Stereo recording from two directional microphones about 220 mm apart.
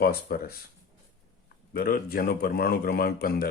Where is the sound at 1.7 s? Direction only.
40° left (ahead or behind).